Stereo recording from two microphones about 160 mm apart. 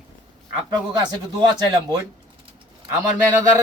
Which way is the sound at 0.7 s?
25° right (ahead or behind).